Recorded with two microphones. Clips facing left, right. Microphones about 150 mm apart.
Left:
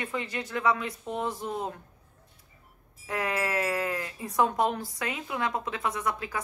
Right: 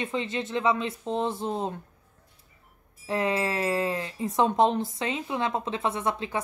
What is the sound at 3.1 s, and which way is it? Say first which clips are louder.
A woman's voice: right 3 dB; 25° right (ahead or behind).